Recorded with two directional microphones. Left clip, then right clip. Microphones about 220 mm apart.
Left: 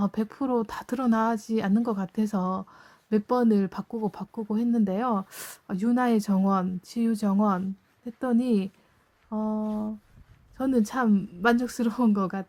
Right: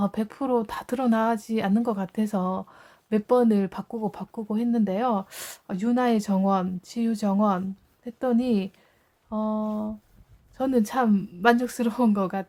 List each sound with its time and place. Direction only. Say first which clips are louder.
0.0 s speech: right 1 dB; 5° left (ahead or behind)